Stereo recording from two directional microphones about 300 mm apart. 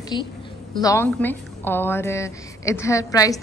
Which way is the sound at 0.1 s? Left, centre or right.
Centre.